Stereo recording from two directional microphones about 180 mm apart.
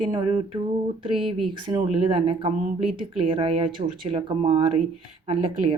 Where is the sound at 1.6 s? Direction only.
25° right (ahead or behind).